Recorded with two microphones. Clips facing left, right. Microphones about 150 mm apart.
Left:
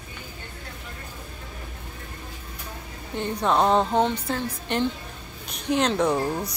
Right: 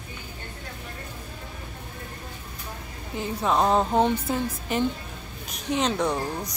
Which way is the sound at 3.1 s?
5° right (ahead or behind).